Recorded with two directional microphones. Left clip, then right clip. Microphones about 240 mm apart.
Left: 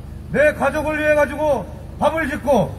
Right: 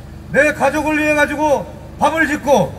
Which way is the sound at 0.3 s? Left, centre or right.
Right.